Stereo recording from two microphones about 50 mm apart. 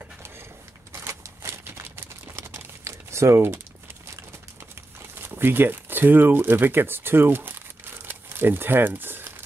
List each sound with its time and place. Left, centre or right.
0.9 s a sound: right
1.8 s crumpling: right
3.3 s speech: right
5.2 s speech: right